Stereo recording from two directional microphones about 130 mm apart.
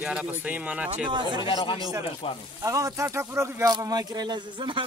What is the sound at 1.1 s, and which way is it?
Speech, 35° right (ahead or behind).